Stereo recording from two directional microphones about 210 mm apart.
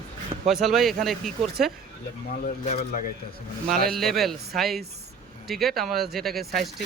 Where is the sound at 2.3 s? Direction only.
40° left (ahead or behind).